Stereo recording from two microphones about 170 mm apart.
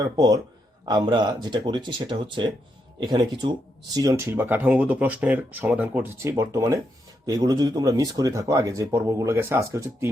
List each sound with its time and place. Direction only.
0.0 s speech: 25° right (ahead or behind)